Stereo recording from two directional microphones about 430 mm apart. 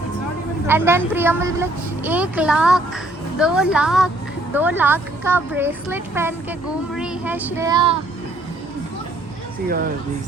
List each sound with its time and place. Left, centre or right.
0.7 s a woman's voice: centre
9.6 s speech: right